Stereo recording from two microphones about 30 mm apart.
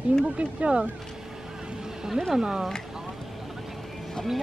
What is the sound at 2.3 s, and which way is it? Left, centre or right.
Speech, right.